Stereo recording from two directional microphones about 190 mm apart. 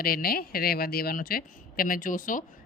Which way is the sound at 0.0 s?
50° left (ahead or behind).